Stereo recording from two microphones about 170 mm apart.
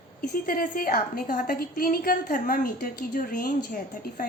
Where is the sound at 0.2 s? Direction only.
55° left (ahead or behind).